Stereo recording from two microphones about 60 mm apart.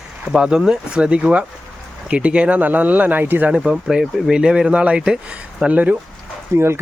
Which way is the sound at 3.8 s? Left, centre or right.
Centre.